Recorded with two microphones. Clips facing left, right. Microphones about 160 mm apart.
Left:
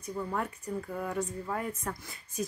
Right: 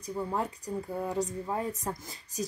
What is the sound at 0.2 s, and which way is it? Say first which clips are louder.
Speech: right 2 dB; 20° right (ahead or behind).